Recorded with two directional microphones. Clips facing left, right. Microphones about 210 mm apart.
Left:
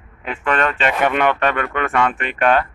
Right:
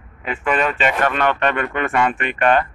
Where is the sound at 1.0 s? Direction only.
15° left (ahead or behind).